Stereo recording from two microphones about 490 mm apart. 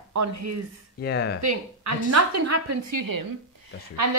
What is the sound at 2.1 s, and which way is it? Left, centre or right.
Speech, right.